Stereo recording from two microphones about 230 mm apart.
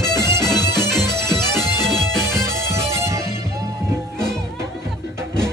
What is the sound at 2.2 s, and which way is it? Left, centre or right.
Music, centre.